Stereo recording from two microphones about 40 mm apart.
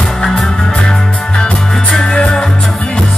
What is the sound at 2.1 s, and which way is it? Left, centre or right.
Music, left.